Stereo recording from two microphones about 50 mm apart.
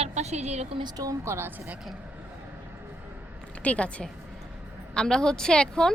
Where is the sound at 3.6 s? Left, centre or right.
Left.